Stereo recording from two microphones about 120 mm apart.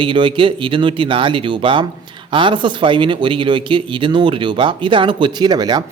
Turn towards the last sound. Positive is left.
turn(degrees=-35)  # may be behind; listen again after turning